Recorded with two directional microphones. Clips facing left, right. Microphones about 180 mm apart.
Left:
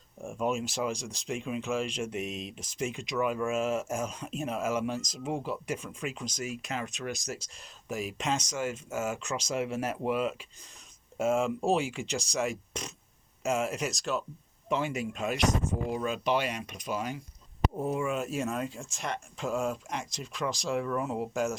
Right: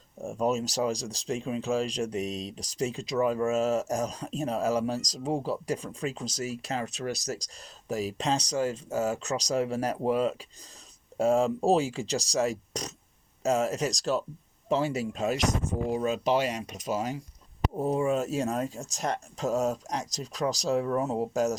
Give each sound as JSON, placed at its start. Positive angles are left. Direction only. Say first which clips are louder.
{"t": 0.2, "sound": "speech", "louder": "right 3 dB", "side_deg": -40}